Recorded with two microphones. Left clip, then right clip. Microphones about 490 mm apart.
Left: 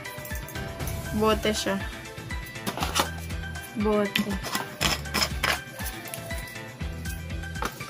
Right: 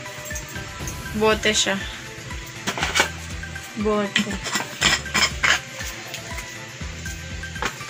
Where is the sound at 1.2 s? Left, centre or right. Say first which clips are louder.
Right 6 dB; left.